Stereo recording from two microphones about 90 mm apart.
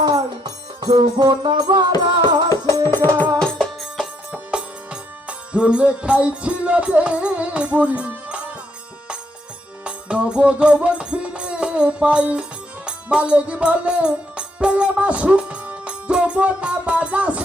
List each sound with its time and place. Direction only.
0.0 s music: 50° right (ahead or behind)
2.8 s music: 25° left (ahead or behind)
3.4 s music: 5° left (ahead or behind)
3.9 s music: 10° right (ahead or behind)
9.8 s music: 10° right (ahead or behind)